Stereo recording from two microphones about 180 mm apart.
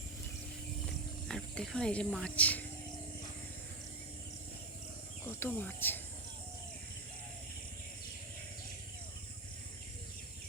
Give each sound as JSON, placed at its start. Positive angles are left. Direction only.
{"t": 1.3, "sound": "speech", "side_deg": 5}
{"t": 5.2, "sound": "speech", "side_deg": 10}